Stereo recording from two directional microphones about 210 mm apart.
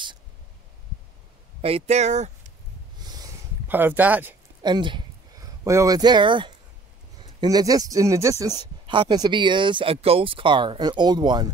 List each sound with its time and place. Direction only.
1.6 s speech: 30° right (ahead or behind)
3.0 s a sound: 20° right (ahead or behind)
4.6 s speech: 20° right (ahead or behind)